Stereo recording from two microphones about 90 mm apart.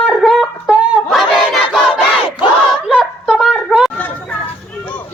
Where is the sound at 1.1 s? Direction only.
Centre (ahead or behind).